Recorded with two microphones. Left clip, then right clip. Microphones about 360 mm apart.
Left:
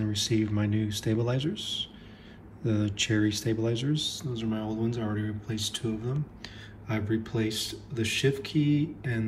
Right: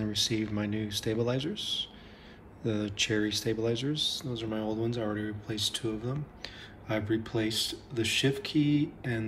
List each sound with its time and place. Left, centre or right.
0.0 s speech: centre
2.6 s speech: centre